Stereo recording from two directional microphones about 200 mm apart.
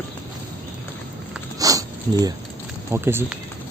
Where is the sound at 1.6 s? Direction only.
15° right (ahead or behind).